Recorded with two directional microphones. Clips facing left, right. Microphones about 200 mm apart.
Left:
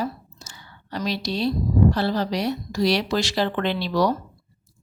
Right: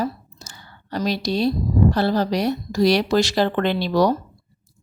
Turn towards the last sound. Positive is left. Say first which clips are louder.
# right 3 dB
turn(degrees=-45)  # may be behind; listen again after turning